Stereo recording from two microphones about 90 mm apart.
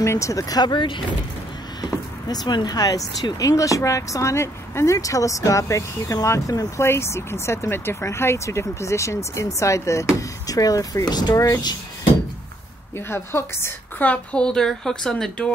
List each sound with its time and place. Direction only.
0.0 s speech: 35° left (ahead or behind); by 1.0 s 65° left (ahead or behind)
1.8 s speech: 50° left (ahead or behind)
6.8 s speech: 30° left (ahead or behind); by 11.3 s 50° left (ahead or behind)
11.3 s speech: 35° left (ahead or behind)
12.9 s a woman's voice: 30° left (ahead or behind)
14.0 s a woman's voice: 15° left (ahead or behind)